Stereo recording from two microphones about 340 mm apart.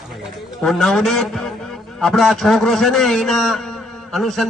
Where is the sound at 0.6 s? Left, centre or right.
Centre.